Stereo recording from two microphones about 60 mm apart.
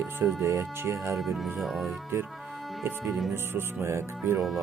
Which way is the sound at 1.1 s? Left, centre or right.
Centre.